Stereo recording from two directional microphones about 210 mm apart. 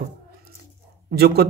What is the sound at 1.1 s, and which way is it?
Speech, 50° right (ahead or behind).